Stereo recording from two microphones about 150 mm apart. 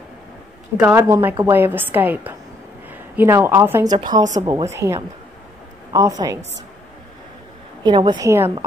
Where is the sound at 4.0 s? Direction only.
30° right (ahead or behind).